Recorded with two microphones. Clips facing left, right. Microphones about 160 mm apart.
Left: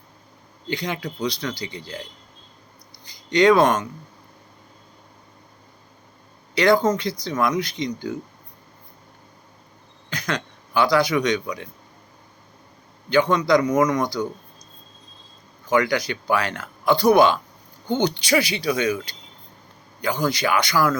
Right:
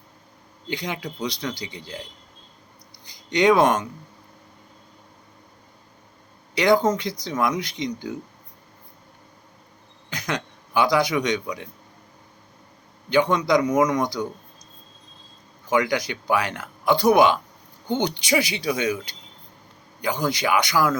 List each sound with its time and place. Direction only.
0.7 s speech: 15° right (ahead or behind)
3.1 s speech: 20° right (ahead or behind)
6.5 s speech: 15° right (ahead or behind)
10.1 s a man's voice: 20° right (ahead or behind)
13.1 s speech: 15° right (ahead or behind)
15.7 s speech: 20° right (ahead or behind)